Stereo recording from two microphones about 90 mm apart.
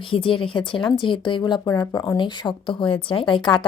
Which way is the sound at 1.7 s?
40° left (ahead or behind).